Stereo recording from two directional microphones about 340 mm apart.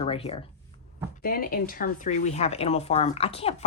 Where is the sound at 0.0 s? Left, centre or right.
Centre.